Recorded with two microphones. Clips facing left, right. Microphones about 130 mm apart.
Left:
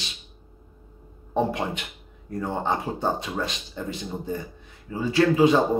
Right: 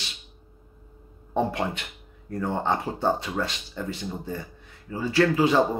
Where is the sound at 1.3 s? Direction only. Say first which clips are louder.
Left 1 dB; 15° left (ahead or behind).